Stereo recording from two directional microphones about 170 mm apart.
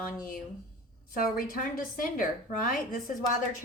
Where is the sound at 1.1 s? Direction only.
55° left (ahead or behind).